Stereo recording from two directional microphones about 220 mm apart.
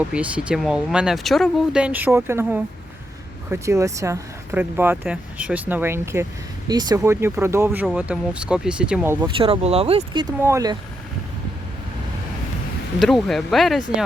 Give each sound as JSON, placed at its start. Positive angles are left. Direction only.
{"t": 0.1, "sound": "speech", "side_deg": -5}
{"t": 9.2, "sound": "speech", "side_deg": -25}
{"t": 13.0, "sound": "speech", "side_deg": 0}